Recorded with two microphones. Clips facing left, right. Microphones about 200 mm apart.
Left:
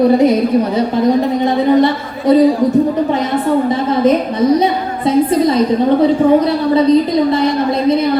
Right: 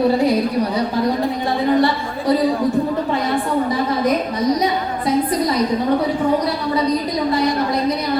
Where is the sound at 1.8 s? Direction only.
20° left (ahead or behind).